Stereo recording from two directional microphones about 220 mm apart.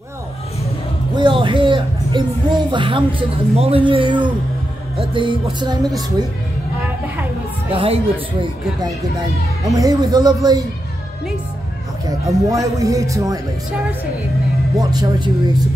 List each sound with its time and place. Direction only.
1.1 s speech: 20° right (ahead or behind)
7.7 s speech: 25° right (ahead or behind)
9.7 s speech: 15° right (ahead or behind)
12.1 s speech: 15° right (ahead or behind)
14.8 s speech: 20° right (ahead or behind)